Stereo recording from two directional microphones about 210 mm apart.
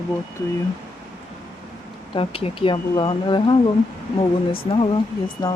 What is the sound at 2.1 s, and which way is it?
Speech, 25° left (ahead or behind).